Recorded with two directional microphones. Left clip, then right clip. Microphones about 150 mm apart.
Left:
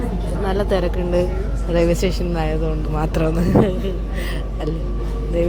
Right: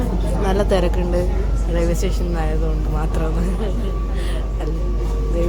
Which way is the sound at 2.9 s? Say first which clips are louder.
Left 6 dB; 30° left (ahead or behind).